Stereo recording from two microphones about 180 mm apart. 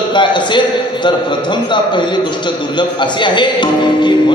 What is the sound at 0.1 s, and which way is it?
A man's voice, 25° left (ahead or behind).